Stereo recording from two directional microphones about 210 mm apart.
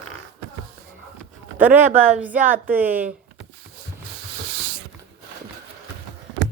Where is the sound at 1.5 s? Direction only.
10° right (ahead or behind).